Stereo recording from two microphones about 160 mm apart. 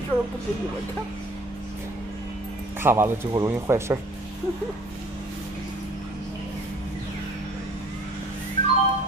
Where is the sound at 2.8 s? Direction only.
15° right (ahead or behind).